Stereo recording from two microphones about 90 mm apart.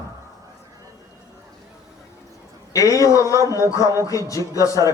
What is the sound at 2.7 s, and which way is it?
A man's voice, 35° left (ahead or behind).